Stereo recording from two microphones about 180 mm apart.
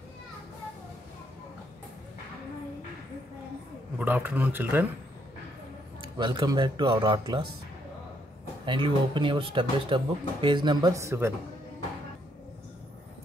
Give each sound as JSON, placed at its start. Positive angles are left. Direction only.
{"t": 4.0, "sound": "speech", "side_deg": -10}
{"t": 5.9, "sound": "speech", "side_deg": -25}
{"t": 8.6, "sound": "speech", "side_deg": -25}